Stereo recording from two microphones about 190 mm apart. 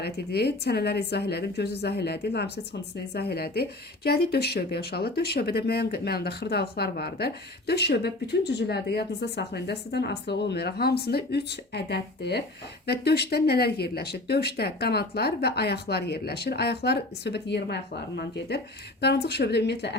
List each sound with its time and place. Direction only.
0.0 s speech: 60° left (ahead or behind)